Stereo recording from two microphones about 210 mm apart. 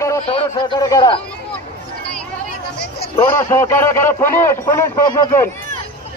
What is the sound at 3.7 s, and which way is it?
A man's voice, 10° left (ahead or behind).